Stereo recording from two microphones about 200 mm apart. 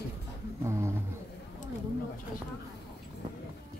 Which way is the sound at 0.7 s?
15° right (ahead or behind).